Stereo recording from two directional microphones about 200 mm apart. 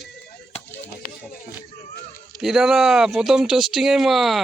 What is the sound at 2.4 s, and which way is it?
Speech, centre (ahead or behind).